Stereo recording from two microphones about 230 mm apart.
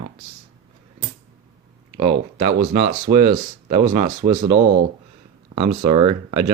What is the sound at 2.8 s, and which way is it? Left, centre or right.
Speech, right.